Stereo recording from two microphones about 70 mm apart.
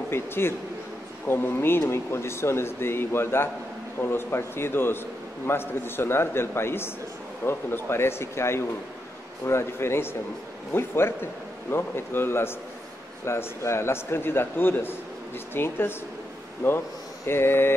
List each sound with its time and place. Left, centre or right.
0.1 s a man's voice: left